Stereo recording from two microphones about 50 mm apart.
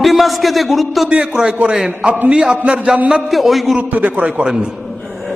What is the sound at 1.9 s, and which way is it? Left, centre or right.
Music, right.